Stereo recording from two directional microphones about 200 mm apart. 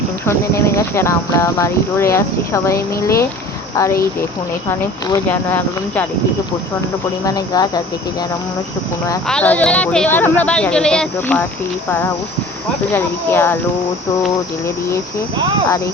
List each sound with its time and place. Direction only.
0.3 s speech: 15° left (ahead or behind)
4.7 s speech: 15° left (ahead or behind)
7.3 s speech: 20° left (ahead or behind)
9.2 s speech: 5° left (ahead or behind)
12.9 s speech: 10° left (ahead or behind)